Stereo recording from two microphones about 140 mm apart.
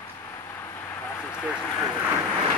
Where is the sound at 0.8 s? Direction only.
15° left (ahead or behind).